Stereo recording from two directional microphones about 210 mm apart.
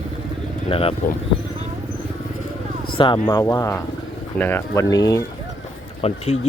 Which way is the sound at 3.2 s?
20° left (ahead or behind).